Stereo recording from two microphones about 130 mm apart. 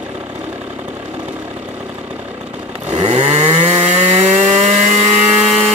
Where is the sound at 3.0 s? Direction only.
50° right (ahead or behind).